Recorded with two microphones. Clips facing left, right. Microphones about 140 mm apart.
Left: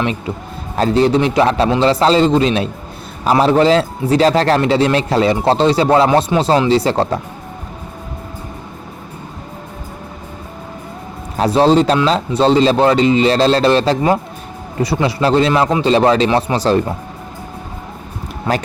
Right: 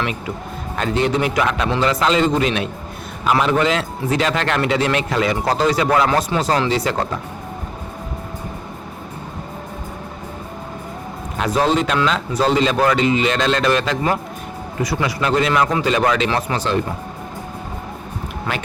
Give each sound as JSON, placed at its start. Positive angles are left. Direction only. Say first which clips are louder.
{"t": 0.0, "sound": "a man's voice", "louder": "left 4 dB", "side_deg": 30}
{"t": 11.3, "sound": "a man's voice", "louder": "left 6 dB", "side_deg": 30}